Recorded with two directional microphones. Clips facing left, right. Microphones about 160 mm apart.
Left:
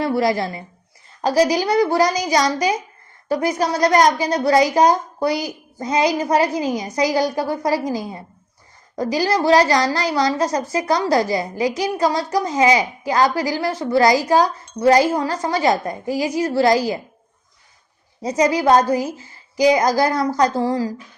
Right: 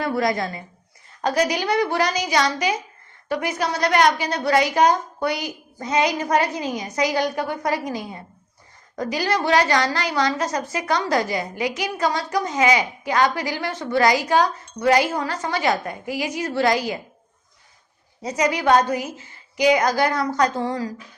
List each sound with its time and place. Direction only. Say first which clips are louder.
0.0 s a woman's voice: left 3 dB; 30° left (ahead or behind)
18.2 s a woman's voice: left 5 dB; 35° left (ahead or behind)